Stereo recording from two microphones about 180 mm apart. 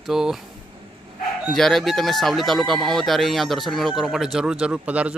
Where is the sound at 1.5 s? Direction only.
Centre (ahead or behind).